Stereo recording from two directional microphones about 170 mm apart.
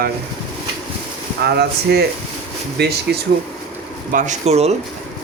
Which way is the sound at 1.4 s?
70° right (ahead or behind).